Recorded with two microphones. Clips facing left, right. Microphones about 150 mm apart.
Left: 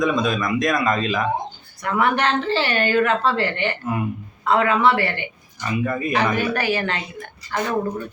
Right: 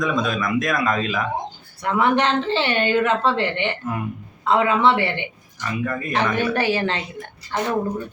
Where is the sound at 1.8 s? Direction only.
20° right (ahead or behind).